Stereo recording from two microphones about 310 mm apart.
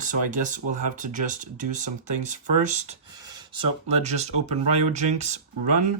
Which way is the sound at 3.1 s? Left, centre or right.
Centre.